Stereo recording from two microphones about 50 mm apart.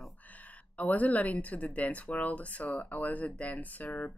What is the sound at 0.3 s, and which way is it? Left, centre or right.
Speech, left.